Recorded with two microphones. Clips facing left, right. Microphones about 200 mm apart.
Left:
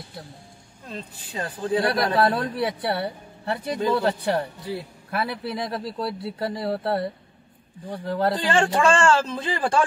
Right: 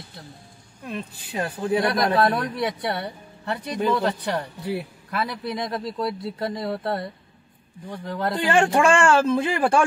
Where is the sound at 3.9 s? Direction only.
30° left (ahead or behind).